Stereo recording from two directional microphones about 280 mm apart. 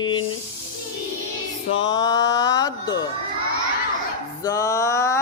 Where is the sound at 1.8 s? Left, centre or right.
Centre.